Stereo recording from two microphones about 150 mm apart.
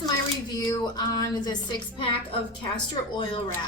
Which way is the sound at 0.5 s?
25° left (ahead or behind).